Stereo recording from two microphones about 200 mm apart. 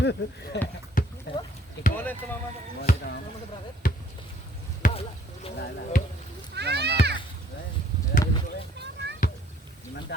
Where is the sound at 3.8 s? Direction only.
40° left (ahead or behind).